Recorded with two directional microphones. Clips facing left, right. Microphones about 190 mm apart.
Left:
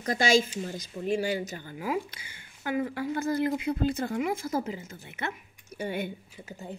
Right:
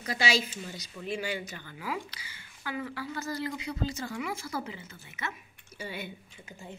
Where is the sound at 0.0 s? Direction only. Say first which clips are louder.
Left 6 dB; 45° left (ahead or behind).